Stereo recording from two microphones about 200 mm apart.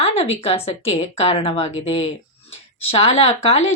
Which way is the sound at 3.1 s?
30° left (ahead or behind).